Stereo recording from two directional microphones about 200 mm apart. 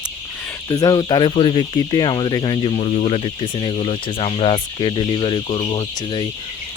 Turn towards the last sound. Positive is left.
turn(degrees=25)  # may be behind; listen again after turning